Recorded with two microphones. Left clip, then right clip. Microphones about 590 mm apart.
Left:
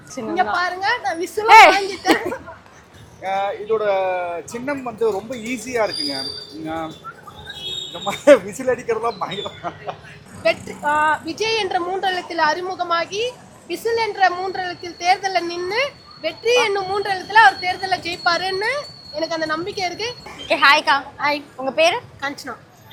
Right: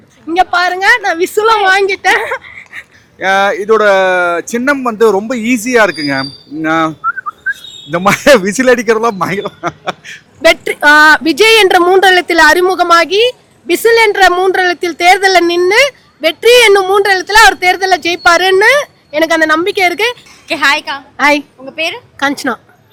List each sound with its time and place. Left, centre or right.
0.3 s speech: right
3.2 s speech: right
8.0 s a man's voice: right
10.4 s a woman's voice: right
20.5 s a woman's voice: centre
21.2 s a woman's voice: right
21.7 s a woman's voice: centre
22.2 s a woman's voice: right